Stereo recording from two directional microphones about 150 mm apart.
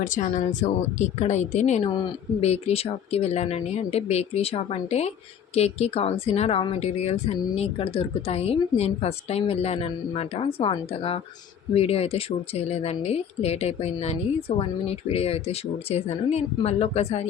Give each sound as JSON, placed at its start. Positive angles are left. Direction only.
{"t": 0.0, "sound": "speech", "side_deg": 55}